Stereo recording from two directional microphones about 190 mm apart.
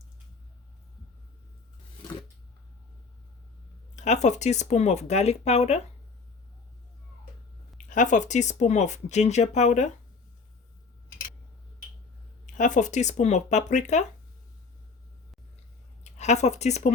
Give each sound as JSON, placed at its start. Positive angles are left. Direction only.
{"t": 3.9, "sound": "speech", "side_deg": 40}
{"t": 7.9, "sound": "speech", "side_deg": 40}
{"t": 12.5, "sound": "speech", "side_deg": 40}
{"t": 16.0, "sound": "speech", "side_deg": 35}